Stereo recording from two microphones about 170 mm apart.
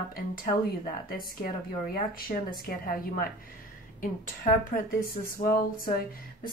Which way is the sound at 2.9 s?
55° left (ahead or behind).